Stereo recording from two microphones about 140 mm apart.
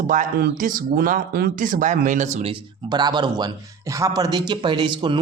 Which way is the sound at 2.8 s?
30° right (ahead or behind).